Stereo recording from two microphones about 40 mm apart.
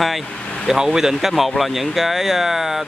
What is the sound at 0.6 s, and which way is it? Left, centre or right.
Speech, centre.